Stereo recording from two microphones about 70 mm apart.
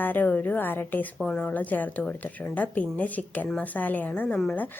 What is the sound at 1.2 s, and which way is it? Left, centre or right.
A woman's voice, centre.